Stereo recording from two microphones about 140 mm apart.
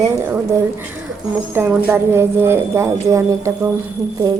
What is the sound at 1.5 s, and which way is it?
Speech, 15° right (ahead or behind).